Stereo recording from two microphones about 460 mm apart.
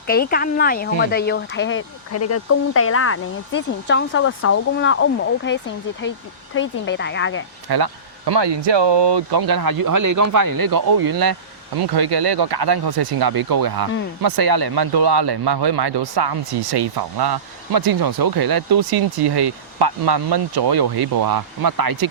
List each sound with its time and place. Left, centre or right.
0.1 s speech: centre
7.7 s speech: right